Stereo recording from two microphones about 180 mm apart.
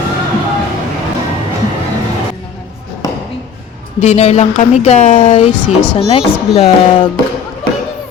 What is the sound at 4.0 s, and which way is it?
Speech, 35° left (ahead or behind).